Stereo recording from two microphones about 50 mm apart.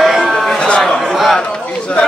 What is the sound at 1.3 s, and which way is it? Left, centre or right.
Speech, centre.